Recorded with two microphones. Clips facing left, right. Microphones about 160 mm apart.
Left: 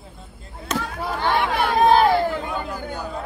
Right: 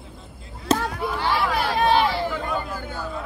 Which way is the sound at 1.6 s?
45° left (ahead or behind).